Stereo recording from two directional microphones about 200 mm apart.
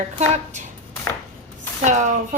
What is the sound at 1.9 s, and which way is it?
Speech, 35° right (ahead or behind).